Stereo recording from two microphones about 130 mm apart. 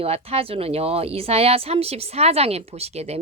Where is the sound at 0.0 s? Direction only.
50° right (ahead or behind).